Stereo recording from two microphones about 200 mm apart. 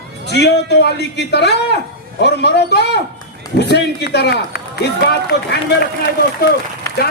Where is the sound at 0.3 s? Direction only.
55° left (ahead or behind).